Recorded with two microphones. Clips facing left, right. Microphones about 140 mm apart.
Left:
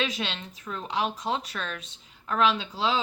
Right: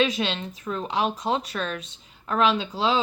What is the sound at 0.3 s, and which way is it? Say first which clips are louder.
Speech: right 6 dB; 35° right (ahead or behind).